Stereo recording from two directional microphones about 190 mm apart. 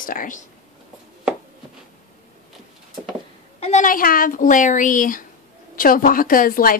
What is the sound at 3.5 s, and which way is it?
A woman's voice, 35° left (ahead or behind).